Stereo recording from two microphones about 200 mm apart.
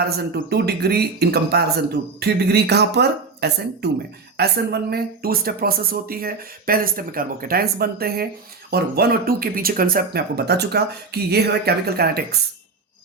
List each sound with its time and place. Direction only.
0.5 s speech: 55° right (ahead or behind)